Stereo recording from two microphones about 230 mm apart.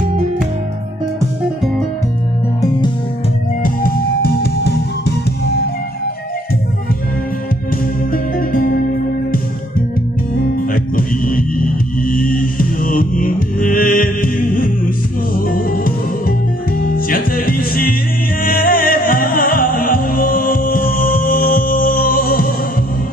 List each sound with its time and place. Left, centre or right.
3.6 s music: left
8.1 s music: left
10.7 s music: left